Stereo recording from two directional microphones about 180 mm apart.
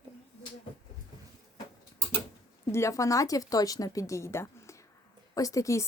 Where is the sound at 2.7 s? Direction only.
15° left (ahead or behind).